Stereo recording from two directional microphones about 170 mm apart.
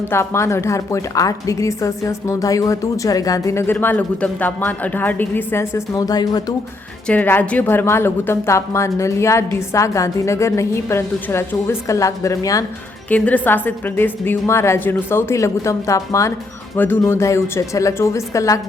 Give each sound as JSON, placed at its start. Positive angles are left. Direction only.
{"t": 0.1, "sound": "a woman's voice", "side_deg": 15}
{"t": 7.1, "sound": "a woman's voice", "side_deg": 10}
{"t": 13.1, "sound": "a woman's voice", "side_deg": 10}